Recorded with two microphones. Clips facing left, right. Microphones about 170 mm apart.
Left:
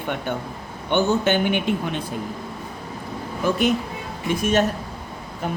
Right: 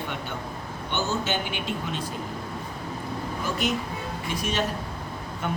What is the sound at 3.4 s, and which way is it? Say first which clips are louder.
A man's voice: left 8 dB; 55° left (ahead or behind).